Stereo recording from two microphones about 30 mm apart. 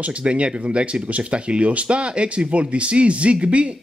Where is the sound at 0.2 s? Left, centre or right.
Right.